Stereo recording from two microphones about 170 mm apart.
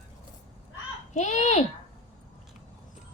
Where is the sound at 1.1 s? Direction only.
45° left (ahead or behind).